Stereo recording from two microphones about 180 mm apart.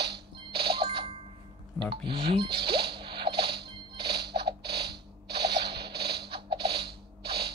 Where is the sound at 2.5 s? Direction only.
60° right (ahead or behind).